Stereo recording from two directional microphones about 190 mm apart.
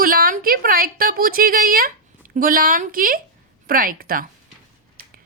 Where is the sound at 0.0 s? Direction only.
50° right (ahead or behind).